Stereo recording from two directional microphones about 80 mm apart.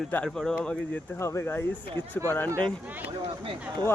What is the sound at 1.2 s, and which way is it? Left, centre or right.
Speech, left.